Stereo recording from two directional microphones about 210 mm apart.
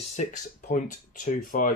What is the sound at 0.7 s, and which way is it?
Speech, 40° left (ahead or behind).